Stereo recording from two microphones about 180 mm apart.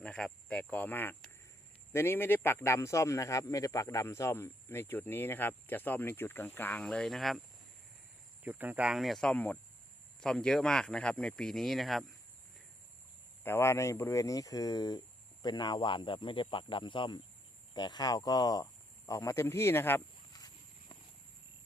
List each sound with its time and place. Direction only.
0.0 s a man's voice: 5° left (ahead or behind)
8.4 s speech: 10° right (ahead or behind)
13.4 s speech: 15° left (ahead or behind)